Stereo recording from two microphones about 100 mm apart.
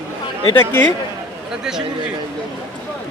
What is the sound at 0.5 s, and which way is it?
Speech, 20° left (ahead or behind).